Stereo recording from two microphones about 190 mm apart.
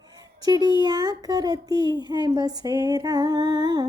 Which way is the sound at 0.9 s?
20° right (ahead or behind).